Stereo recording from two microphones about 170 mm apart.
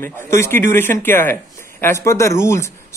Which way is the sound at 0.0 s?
15° left (ahead or behind).